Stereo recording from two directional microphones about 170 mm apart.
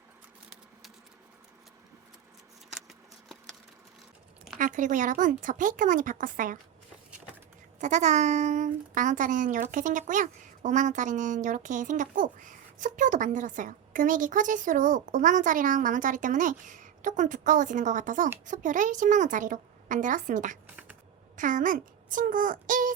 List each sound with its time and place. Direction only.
2.7 s scissors: centre (ahead or behind)
4.5 s speech: 50° right (ahead or behind)
7.8 s speech: 45° right (ahead or behind)
20.7 s a sound: 10° right (ahead or behind)
21.3 s speech: 50° right (ahead or behind)